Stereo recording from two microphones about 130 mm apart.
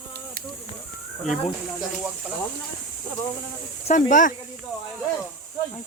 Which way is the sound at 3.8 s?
75° left (ahead or behind).